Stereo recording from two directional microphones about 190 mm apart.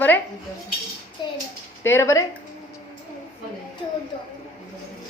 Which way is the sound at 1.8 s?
15° left (ahead or behind).